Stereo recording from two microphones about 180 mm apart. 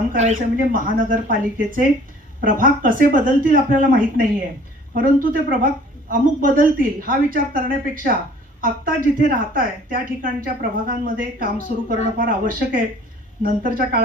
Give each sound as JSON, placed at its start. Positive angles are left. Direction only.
{"t": 0.1, "sound": "a woman's voice", "side_deg": -45}